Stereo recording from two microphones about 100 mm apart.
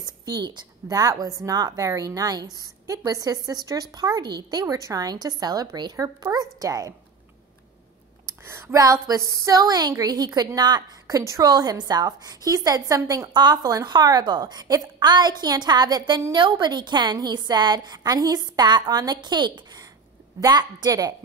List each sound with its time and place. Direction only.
0.0 s a woman's voice: 45° right (ahead or behind)
8.5 s speech: 25° right (ahead or behind)
8.8 s a woman's voice: 35° right (ahead or behind)
13.3 s a woman's voice: 45° right (ahead or behind)